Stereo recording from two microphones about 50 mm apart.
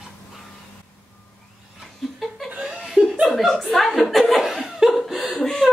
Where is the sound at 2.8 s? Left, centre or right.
Centre.